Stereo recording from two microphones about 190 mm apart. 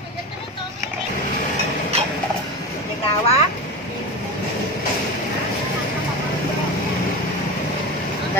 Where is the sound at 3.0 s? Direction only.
35° left (ahead or behind).